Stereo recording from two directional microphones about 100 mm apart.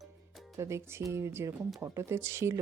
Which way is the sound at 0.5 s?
25° right (ahead or behind).